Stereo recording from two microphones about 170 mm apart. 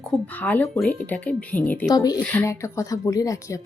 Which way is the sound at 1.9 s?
20° left (ahead or behind).